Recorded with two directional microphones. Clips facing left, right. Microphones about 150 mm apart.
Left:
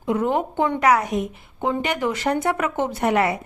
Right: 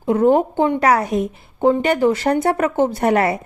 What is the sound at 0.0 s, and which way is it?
A woman's voice, 40° right (ahead or behind).